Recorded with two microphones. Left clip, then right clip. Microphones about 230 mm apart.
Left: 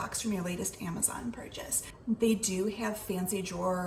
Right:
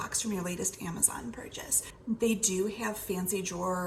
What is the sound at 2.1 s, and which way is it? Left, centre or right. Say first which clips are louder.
A woman's voice: right 1 dB; right.